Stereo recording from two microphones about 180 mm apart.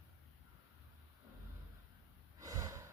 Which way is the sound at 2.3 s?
15° right (ahead or behind).